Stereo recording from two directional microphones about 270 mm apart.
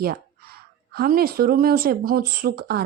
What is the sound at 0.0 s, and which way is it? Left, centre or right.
A woman's voice, right.